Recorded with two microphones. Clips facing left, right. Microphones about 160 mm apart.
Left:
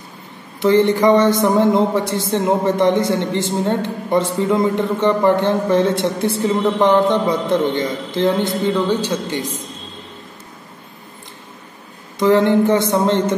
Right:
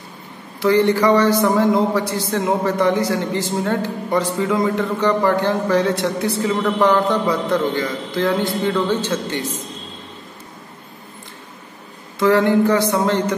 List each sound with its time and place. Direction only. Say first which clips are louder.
0.6 s a man's voice: left 2 dB; 20° left (ahead or behind)
12.2 s a man's voice: left 1 dB; 20° left (ahead or behind)